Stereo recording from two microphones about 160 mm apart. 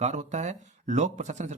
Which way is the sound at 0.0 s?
45° right (ahead or behind).